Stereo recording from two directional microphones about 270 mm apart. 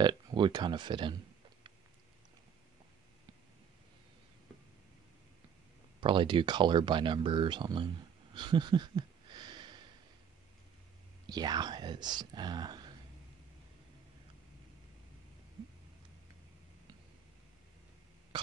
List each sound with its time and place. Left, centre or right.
0.0 s speech: centre
5.9 s speech: centre
11.2 s speech: centre
18.3 s throat clearing: centre